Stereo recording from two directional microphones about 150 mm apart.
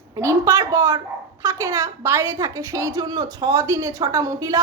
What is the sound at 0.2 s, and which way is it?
Speech, 20° right (ahead or behind).